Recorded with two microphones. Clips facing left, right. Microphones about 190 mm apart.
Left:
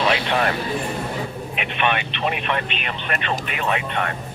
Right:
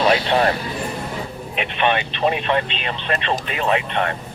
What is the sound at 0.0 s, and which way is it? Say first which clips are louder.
Speech: right 4 dB; 35° right (ahead or behind).